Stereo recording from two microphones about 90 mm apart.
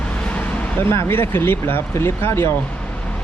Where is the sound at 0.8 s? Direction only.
30° left (ahead or behind).